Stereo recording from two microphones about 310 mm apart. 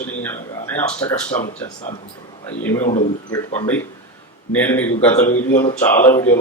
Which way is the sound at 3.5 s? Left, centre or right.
Centre.